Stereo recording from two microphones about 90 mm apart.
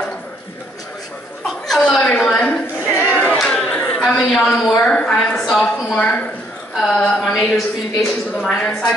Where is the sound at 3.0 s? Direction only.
20° left (ahead or behind).